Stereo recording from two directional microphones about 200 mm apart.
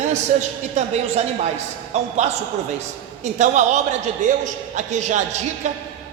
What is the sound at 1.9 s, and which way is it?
Speech, 35° right (ahead or behind).